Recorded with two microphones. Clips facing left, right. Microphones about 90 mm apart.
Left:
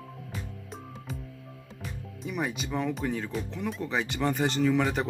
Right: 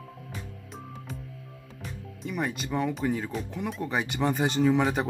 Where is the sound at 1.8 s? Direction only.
Centre (ahead or behind).